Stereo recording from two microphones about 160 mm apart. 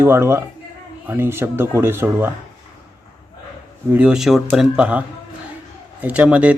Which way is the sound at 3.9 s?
5° right (ahead or behind).